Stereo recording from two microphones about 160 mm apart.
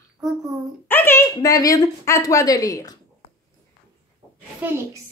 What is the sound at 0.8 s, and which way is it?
Speech, 15° left (ahead or behind).